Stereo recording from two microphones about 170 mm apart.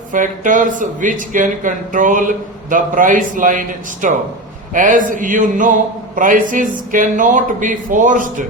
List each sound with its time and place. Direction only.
0.1 s speech: 50° right (ahead or behind)